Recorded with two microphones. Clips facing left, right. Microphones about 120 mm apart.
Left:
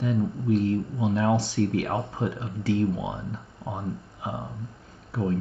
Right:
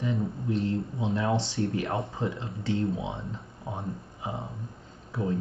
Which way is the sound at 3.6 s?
20° left (ahead or behind).